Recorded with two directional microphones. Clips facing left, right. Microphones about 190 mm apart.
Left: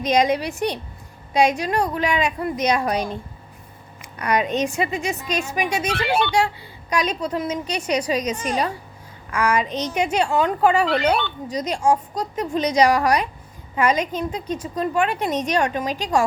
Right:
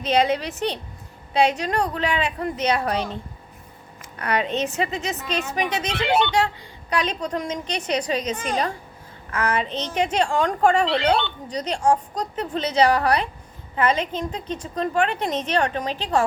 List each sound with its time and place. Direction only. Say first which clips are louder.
0.0 s a woman's voice: left 2 dB; 15° left (ahead or behind)
10.8 s speech: left 1 dB; 25° right (ahead or behind)
11.4 s a woman's voice: left 2 dB; 10° left (ahead or behind)